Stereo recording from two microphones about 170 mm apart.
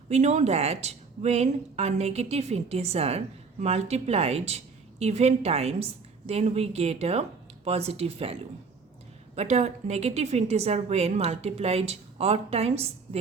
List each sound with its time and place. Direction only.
0.1 s speech: 40° right (ahead or behind)